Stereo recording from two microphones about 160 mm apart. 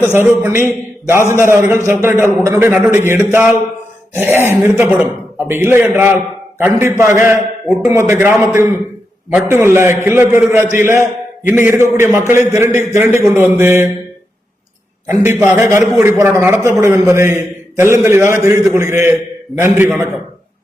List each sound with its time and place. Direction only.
0.2 s a man's voice: 15° right (ahead or behind)
15.0 s a man's voice: 15° right (ahead or behind)